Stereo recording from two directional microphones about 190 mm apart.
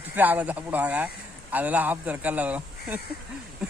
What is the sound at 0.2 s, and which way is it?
Speech, 10° right (ahead or behind).